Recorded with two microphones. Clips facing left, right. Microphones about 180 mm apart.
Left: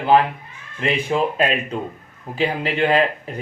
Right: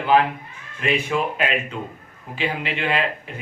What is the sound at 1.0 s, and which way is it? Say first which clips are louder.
Speech: left 4 dB; 35° left (ahead or behind).